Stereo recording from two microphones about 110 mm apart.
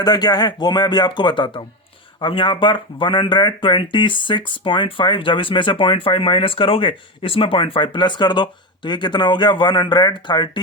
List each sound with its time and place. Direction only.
0.0 s speech: 40° left (ahead or behind)